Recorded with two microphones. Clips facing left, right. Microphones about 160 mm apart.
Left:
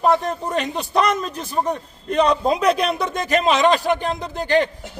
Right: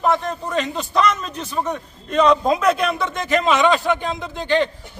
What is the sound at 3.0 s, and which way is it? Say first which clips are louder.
A man's voice: even; 40° left (ahead or behind).